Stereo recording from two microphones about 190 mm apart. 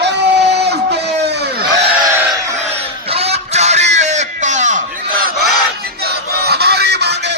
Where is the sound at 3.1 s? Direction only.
35° right (ahead or behind).